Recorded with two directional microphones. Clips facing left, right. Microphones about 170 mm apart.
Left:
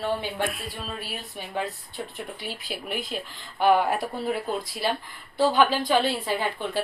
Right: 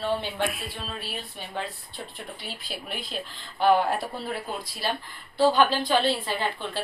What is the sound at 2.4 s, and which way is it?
A woman's voice, 10° left (ahead or behind).